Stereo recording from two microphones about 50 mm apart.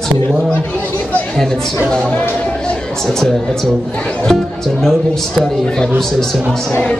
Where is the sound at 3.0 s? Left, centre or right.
Centre.